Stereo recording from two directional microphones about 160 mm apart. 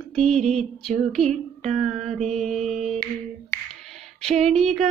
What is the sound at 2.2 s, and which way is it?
Mantra, 45° right (ahead or behind).